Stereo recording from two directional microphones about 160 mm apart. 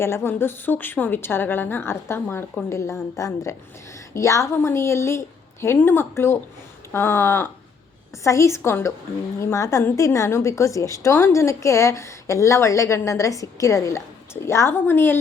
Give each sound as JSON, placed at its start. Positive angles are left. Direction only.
{"t": 0.0, "sound": "a woman's voice", "side_deg": 15}